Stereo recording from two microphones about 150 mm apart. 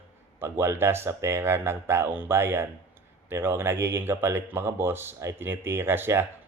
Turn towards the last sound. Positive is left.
turn(degrees=-15)  # may be behind; listen again after turning